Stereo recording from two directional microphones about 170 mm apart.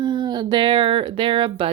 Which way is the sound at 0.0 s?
25° right (ahead or behind).